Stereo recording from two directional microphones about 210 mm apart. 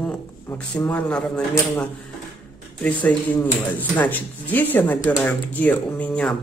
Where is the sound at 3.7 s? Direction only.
10° left (ahead or behind).